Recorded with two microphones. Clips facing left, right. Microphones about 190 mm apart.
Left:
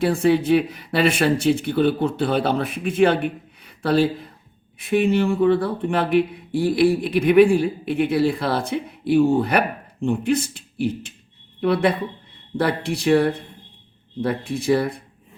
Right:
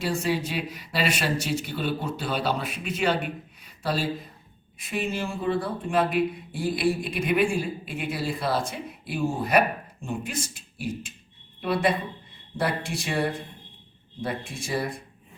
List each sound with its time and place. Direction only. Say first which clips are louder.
0.0 s speech: left 9 dB; 55° left (ahead or behind)